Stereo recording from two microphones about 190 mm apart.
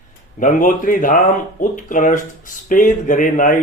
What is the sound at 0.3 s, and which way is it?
Speech, 45° left (ahead or behind).